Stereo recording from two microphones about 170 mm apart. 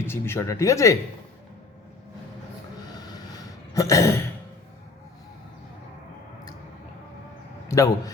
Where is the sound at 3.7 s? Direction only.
20° left (ahead or behind).